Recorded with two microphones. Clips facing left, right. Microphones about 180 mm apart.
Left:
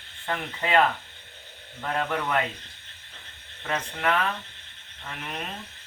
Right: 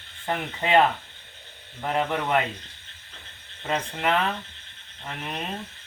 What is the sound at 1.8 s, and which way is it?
Speech, 20° right (ahead or behind).